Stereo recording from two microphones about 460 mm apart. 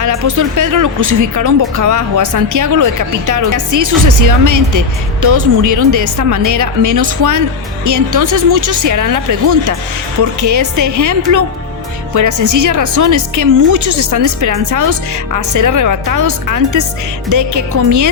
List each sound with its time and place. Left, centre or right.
0.0 s speech: right